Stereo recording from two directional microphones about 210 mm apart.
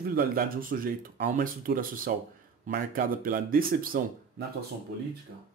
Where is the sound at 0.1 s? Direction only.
45° right (ahead or behind).